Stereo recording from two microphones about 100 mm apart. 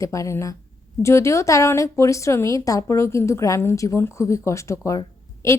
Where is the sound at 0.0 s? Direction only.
30° left (ahead or behind).